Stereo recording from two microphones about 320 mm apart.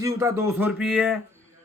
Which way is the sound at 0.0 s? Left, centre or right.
Centre.